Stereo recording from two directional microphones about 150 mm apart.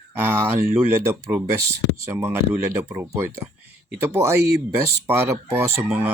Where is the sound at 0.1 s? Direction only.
15° right (ahead or behind).